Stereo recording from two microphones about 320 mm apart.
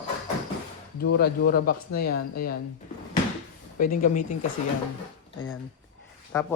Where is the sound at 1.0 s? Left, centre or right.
Left.